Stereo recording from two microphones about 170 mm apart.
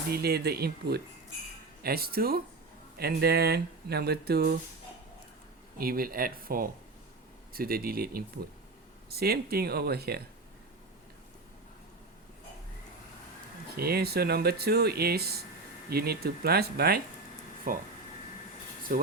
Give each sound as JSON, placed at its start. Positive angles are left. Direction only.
{"t": 0.1, "sound": "speech", "side_deg": -70}
{"t": 5.7, "sound": "speech", "side_deg": -60}
{"t": 13.7, "sound": "speech", "side_deg": -65}
{"t": 17.7, "sound": "speech", "side_deg": -55}
{"t": 18.9, "sound": "speech", "side_deg": -55}